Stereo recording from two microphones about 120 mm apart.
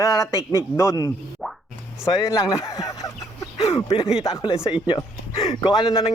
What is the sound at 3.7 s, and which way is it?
Speech, 50° left (ahead or behind).